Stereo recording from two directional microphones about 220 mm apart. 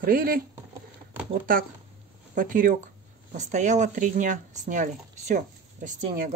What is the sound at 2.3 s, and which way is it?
Speech, 35° right (ahead or behind).